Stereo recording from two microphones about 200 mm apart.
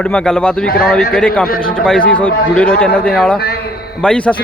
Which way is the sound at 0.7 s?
50° left (ahead or behind).